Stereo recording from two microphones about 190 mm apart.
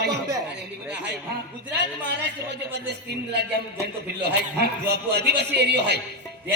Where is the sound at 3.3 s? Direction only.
60° right (ahead or behind).